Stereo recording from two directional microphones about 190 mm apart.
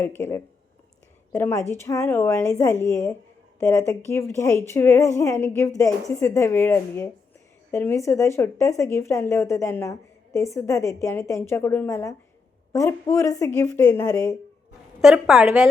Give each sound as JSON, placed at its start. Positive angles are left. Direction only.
{"t": 0.0, "sound": "speech", "side_deg": 10}
{"t": 15.0, "sound": "a woman's voice", "side_deg": 0}